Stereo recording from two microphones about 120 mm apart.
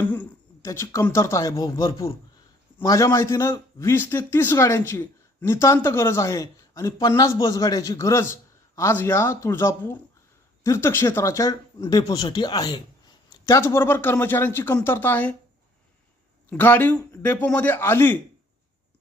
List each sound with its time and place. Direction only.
0.0 s a sound: 15° left (ahead or behind)
0.6 s a man's voice: 25° left (ahead or behind)
16.5 s a man's voice: 15° left (ahead or behind)